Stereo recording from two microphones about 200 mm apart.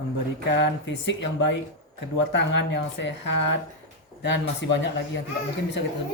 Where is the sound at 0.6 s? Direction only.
65° left (ahead or behind).